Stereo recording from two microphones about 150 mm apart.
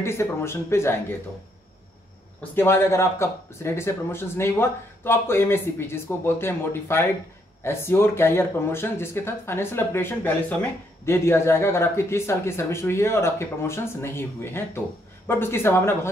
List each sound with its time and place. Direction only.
0.0 s speech: 15° left (ahead or behind)
2.5 s speech: 15° left (ahead or behind)